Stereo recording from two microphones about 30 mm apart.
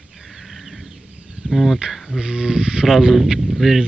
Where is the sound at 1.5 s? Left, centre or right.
Centre.